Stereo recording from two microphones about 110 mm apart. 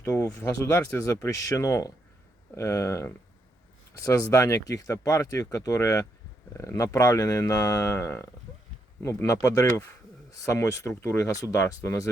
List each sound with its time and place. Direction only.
0.0 s speech: 20° left (ahead or behind)